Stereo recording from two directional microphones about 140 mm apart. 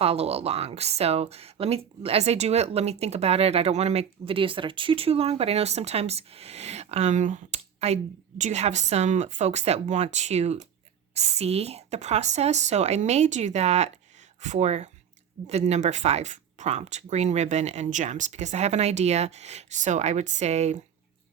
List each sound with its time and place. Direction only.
0.0 s speech: 45° right (ahead or behind)